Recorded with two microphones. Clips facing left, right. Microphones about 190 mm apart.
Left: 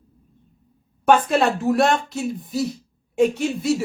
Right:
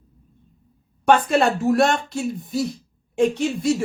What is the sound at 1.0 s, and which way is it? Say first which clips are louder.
Speech: even; centre (ahead or behind).